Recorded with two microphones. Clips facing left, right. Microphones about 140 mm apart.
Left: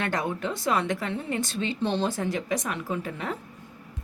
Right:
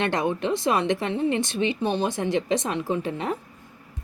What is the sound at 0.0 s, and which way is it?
Speech, 20° right (ahead or behind).